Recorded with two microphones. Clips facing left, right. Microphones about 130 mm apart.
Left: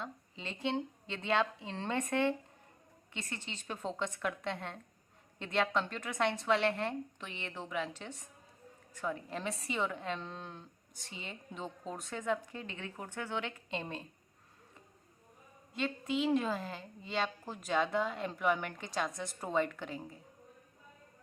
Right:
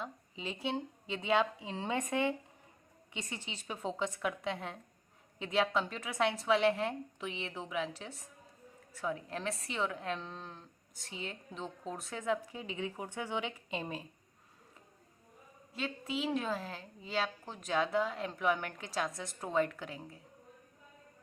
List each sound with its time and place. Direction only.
0.0 s a woman's voice: 10° right (ahead or behind)
15.7 s a woman's voice: 5° right (ahead or behind)